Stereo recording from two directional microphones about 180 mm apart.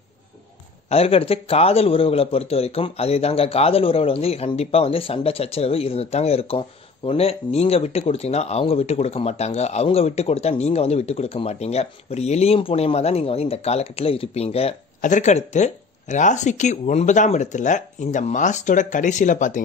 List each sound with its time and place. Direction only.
0.8 s speech: 35° left (ahead or behind)